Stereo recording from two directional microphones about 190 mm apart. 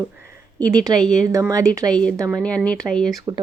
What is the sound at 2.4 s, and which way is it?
Speech, 5° left (ahead or behind).